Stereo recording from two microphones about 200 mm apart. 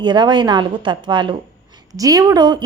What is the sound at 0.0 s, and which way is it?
A woman's voice, 20° right (ahead or behind).